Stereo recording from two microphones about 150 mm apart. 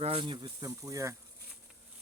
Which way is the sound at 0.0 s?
40° right (ahead or behind).